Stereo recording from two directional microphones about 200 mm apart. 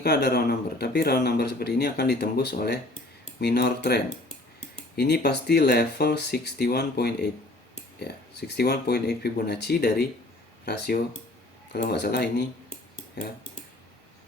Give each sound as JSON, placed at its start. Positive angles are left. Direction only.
{"t": 0.0, "sound": "speech", "side_deg": 55}